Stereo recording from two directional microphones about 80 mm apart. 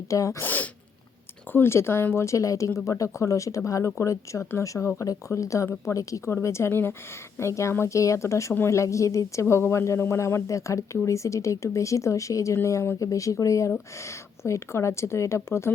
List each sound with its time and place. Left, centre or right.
0.1 s speech: left
0.4 s speech: left
1.5 s a woman's voice: left